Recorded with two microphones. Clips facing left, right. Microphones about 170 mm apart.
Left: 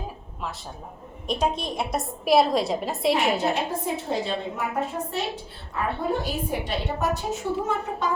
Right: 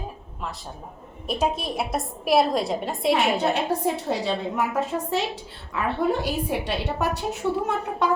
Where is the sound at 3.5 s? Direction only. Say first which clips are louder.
Right 3 dB; 70° right (ahead or behind).